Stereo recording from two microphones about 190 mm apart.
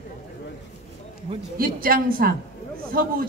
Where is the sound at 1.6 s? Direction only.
50° right (ahead or behind).